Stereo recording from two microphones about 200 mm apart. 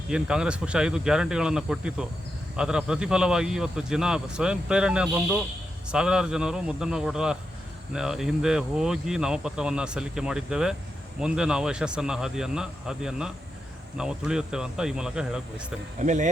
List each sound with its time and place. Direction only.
0.1 s a man's voice: 5° right (ahead or behind)
16.0 s speech: 35° right (ahead or behind)